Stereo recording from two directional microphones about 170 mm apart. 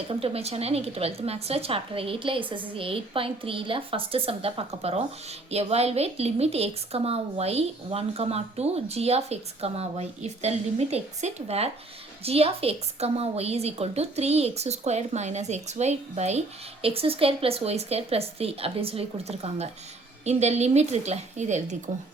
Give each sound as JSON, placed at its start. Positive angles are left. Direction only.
{"t": 0.1, "sound": "a woman's voice", "side_deg": -35}